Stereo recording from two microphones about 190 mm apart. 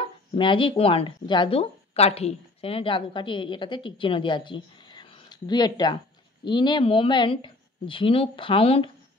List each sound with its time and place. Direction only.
0.4 s speech: 25° left (ahead or behind)